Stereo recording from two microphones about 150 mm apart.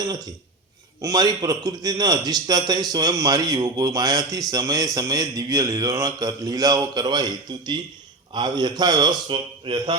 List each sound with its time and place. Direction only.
1.0 s a man's voice: 25° right (ahead or behind)